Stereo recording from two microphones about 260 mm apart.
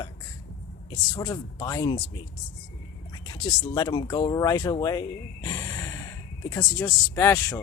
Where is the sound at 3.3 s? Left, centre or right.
Centre.